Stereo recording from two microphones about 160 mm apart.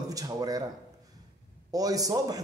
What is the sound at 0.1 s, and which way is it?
Speech, 25° right (ahead or behind).